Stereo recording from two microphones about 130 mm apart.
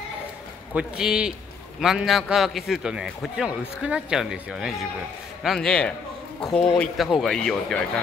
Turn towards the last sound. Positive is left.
turn(degrees=5)  # may be behind; listen again after turning